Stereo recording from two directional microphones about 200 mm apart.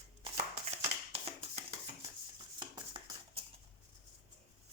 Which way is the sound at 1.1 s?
30° right (ahead or behind).